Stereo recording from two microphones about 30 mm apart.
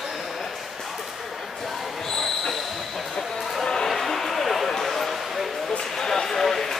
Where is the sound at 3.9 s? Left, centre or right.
Centre.